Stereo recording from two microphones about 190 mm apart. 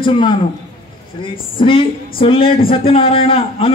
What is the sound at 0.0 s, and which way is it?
A man's voice, 25° left (ahead or behind).